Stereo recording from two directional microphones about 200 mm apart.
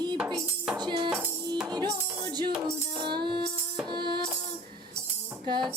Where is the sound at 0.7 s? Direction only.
20° right (ahead or behind).